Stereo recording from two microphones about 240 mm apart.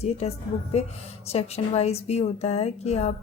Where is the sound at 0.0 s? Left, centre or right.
Left.